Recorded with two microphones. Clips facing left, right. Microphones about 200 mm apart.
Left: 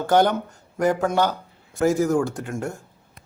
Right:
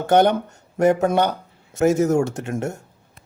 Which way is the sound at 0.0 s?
20° right (ahead or behind).